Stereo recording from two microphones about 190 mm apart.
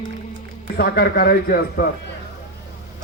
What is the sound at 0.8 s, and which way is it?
Speech, 55° left (ahead or behind).